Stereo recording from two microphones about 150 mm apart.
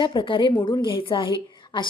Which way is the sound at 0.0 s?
30° left (ahead or behind).